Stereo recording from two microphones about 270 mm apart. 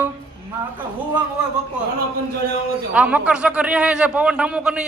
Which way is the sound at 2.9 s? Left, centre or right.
Centre.